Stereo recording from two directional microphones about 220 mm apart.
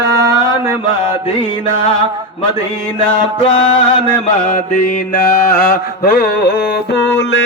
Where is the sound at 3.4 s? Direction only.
25° left (ahead or behind).